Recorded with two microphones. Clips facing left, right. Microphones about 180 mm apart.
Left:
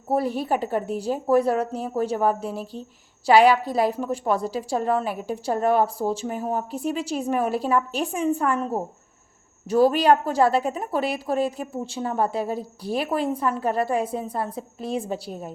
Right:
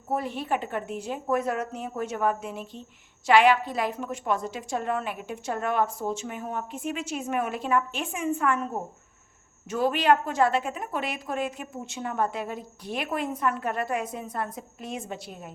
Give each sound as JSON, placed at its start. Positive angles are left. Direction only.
{"t": 0.1, "sound": "a woman's voice", "side_deg": 35}